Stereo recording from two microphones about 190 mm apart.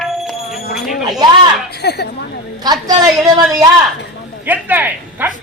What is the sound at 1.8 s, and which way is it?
Speech, 60° left (ahead or behind).